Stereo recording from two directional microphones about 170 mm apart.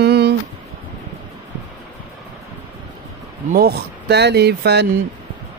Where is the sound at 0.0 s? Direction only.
75° right (ahead or behind).